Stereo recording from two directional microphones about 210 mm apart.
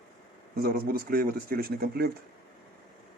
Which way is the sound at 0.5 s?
45° right (ahead or behind).